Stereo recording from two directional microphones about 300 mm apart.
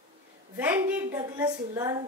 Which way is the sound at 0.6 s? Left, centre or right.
Centre.